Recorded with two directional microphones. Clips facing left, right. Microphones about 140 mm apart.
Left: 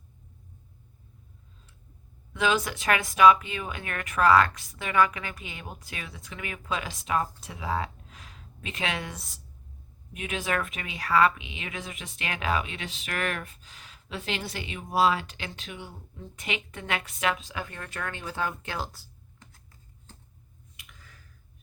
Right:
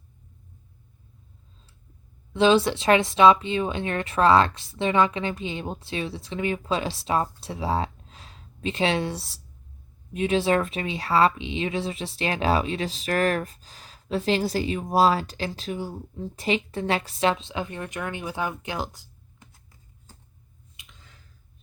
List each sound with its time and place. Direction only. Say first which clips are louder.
2.3 s speech: right 8 dB; 30° right (ahead or behind)
20.7 s finger snapping: even; 25° right (ahead or behind)